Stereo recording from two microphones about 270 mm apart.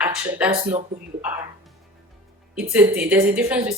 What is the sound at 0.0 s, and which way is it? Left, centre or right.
Speech, centre.